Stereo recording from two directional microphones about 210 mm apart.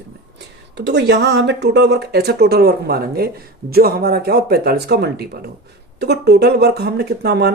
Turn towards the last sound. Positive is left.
turn(degrees=-50)  # may be behind; listen again after turning